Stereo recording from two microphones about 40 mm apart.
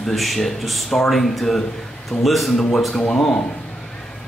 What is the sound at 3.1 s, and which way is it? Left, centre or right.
Speech, left.